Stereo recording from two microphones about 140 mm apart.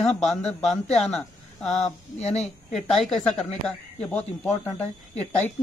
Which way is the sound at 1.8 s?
50° left (ahead or behind).